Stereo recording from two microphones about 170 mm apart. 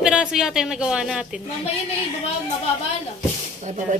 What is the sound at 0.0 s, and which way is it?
Speech, 5° right (ahead or behind).